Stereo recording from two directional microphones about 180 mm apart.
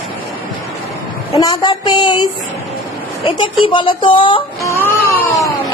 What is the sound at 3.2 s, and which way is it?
A woman's voice, 25° left (ahead or behind).